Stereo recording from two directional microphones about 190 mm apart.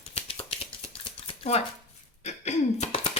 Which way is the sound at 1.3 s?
35° left (ahead or behind).